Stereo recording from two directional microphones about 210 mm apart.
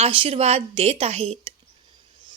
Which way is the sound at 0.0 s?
25° right (ahead or behind).